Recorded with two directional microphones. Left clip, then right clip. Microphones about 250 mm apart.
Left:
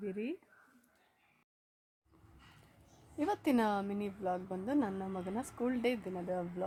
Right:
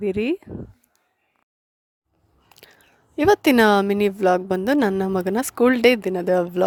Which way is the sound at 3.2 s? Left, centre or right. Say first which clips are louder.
Right 18 dB; right.